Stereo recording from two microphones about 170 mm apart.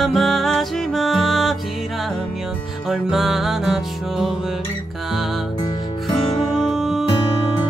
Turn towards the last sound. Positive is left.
turn(degrees=0)  # may be behind; listen again after turning